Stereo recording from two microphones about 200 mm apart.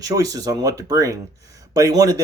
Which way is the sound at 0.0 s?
15° right (ahead or behind).